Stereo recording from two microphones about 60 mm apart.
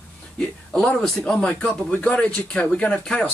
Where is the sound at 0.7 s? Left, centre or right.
Centre.